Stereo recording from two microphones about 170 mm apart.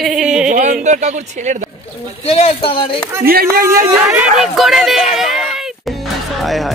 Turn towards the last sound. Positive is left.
turn(degrees=0)  # may be behind; listen again after turning